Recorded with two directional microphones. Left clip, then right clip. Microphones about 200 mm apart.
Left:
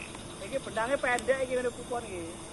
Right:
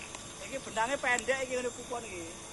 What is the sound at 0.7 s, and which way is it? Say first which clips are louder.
Speech: left 1 dB; 65° right (ahead or behind).